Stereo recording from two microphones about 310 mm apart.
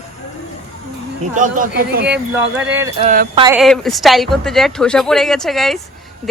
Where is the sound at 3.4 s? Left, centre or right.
Centre.